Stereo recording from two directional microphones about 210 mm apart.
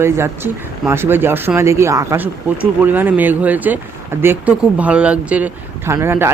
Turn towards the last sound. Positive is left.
turn(degrees=-10)  # may be behind; listen again after turning